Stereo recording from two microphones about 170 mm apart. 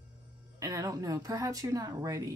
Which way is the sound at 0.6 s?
20° right (ahead or behind).